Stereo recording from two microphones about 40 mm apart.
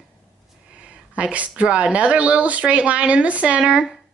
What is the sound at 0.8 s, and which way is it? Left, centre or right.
Speech, right.